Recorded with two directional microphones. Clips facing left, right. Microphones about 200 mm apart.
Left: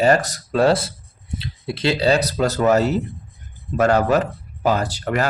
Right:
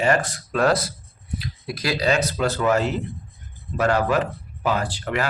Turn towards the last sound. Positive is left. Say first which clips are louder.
# left 3 dB
turn(degrees=40)  # may be behind; listen again after turning